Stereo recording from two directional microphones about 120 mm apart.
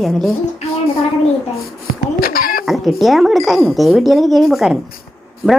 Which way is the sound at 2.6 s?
Centre (ahead or behind).